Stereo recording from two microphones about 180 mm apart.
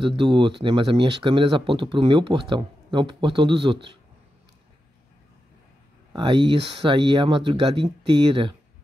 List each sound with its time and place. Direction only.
0.0 s speech: 25° right (ahead or behind)
6.1 s speech: 25° right (ahead or behind)